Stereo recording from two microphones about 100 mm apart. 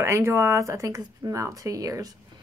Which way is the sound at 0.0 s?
30° right (ahead or behind).